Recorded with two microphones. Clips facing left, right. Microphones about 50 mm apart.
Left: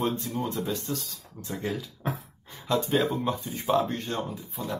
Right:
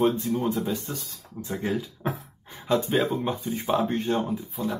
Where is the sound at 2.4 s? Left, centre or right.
Centre.